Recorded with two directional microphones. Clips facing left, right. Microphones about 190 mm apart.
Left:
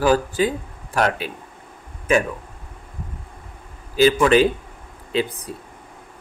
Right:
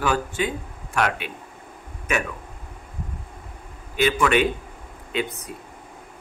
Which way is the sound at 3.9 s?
30° left (ahead or behind).